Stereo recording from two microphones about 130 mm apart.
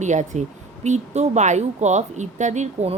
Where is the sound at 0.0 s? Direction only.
65° right (ahead or behind).